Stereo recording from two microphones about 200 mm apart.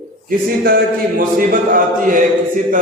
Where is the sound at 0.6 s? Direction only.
45° right (ahead or behind).